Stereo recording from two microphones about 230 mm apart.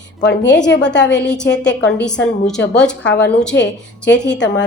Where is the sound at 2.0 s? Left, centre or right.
Centre.